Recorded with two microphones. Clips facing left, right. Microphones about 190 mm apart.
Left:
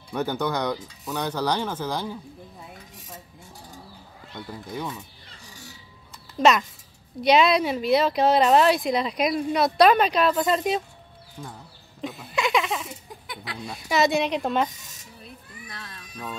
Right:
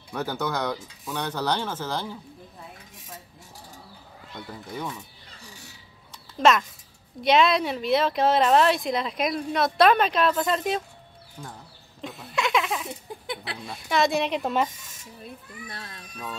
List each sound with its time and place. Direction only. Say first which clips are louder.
0.3 s speech: left 1 dB; 5° right (ahead or behind)
0.7 s speech: left 2 dB; 10° left (ahead or behind)
4.7 s speech: left 1 dB; centre (ahead or behind)
6.4 s speech: left 1 dB; centre (ahead or behind)
12.0 s speech: left 2 dB; centre (ahead or behind)
13.3 s speech: right 4 dB; 30° right (ahead or behind)
13.6 s speech: left 2 dB; centre (ahead or behind)
15.7 s baby cry: left 1 dB; 35° right (ahead or behind)